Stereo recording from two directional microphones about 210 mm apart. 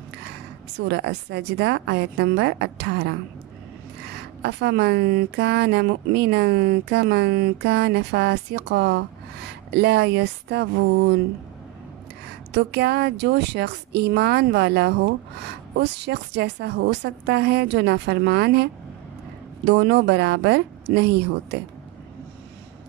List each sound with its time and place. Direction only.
0.7 s speech: 55° right (ahead or behind)
4.4 s speech: 55° right (ahead or behind)
12.5 s speech: 50° right (ahead or behind)
19.7 s a woman's voice: 55° right (ahead or behind)